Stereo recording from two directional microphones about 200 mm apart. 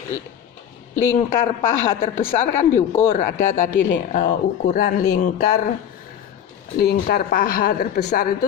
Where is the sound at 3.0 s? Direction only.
40° left (ahead or behind).